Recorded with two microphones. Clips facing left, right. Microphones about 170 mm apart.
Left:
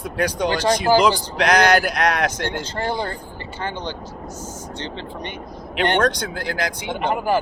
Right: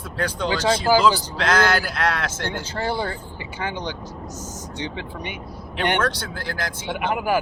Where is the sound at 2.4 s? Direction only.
10° right (ahead or behind).